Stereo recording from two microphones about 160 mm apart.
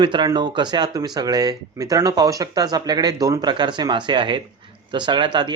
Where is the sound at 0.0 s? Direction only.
30° right (ahead or behind).